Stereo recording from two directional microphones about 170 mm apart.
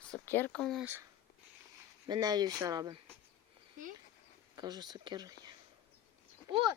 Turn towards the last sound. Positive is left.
turn(degrees=-30)  # may be behind; listen again after turning